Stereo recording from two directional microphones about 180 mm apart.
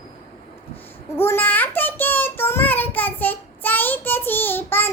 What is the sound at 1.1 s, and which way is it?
Child singing, 15° left (ahead or behind).